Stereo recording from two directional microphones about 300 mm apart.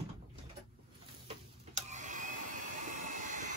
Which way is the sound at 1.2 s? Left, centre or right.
Right.